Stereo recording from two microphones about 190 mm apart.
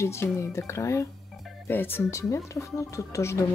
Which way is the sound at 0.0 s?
15° left (ahead or behind).